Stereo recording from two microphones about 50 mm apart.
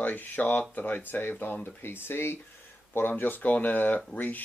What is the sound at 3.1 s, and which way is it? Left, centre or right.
Speech, left.